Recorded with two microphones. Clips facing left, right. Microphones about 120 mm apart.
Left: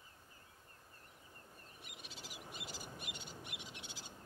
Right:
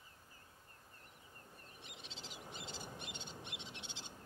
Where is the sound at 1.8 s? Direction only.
25° right (ahead or behind).